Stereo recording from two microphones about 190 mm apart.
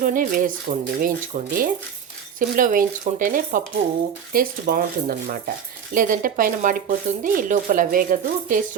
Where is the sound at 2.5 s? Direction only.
45° right (ahead or behind).